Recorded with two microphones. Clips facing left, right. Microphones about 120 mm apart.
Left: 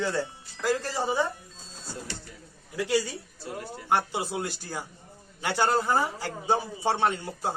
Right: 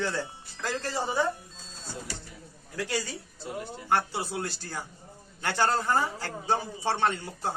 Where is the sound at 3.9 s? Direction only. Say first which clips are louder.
Left 1 dB; 15° left (ahead or behind).